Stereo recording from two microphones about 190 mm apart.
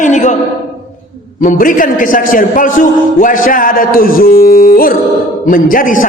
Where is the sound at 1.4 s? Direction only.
45° left (ahead or behind).